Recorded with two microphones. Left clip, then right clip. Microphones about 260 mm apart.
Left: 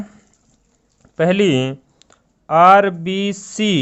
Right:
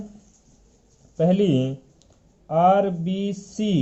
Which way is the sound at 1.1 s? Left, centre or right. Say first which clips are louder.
Left 5 dB; left.